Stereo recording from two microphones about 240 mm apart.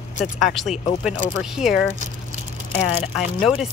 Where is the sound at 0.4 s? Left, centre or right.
Centre.